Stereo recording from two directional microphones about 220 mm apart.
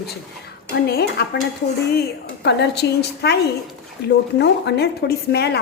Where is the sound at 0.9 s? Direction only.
45° left (ahead or behind).